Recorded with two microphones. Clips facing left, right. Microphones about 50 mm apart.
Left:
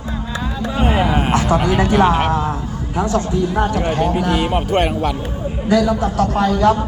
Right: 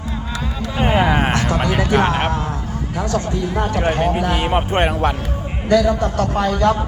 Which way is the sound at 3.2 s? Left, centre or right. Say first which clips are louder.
Left 3 dB; right.